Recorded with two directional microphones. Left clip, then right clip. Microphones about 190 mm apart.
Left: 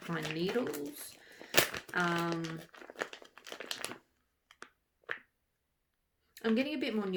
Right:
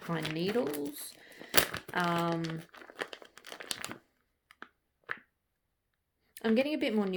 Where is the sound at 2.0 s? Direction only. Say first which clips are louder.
Right 3 dB; 30° right (ahead or behind).